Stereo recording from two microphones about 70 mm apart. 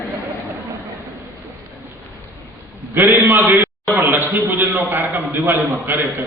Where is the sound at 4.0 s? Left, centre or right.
Right.